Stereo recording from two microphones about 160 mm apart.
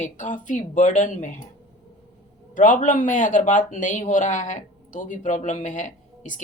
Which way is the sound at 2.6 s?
55° left (ahead or behind).